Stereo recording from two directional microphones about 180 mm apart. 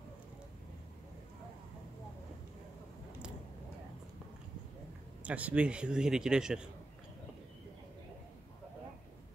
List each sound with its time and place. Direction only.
5.2 s speech: 10° right (ahead or behind)